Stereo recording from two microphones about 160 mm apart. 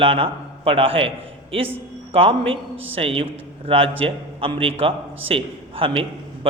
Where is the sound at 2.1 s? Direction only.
35° right (ahead or behind).